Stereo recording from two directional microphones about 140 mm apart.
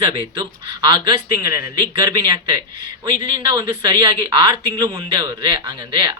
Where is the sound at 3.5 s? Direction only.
30° right (ahead or behind).